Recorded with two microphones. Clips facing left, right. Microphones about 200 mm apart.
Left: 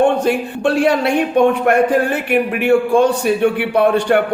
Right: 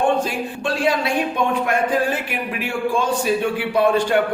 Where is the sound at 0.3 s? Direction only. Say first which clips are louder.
Left 8 dB; 65° left (ahead or behind).